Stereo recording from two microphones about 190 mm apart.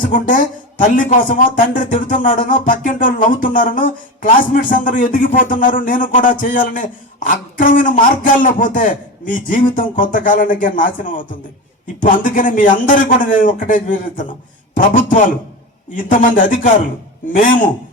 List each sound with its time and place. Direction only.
0.0 s speech: 45° left (ahead or behind)